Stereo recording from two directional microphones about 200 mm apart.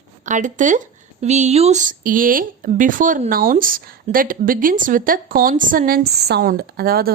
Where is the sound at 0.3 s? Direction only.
40° right (ahead or behind).